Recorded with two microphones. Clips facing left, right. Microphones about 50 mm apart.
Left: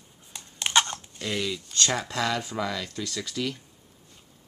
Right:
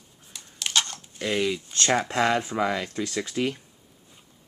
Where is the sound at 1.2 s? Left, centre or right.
Right.